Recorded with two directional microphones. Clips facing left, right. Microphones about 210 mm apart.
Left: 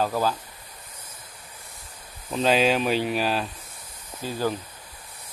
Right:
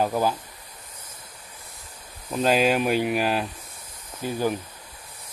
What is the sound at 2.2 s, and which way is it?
Speech, 5° right (ahead or behind).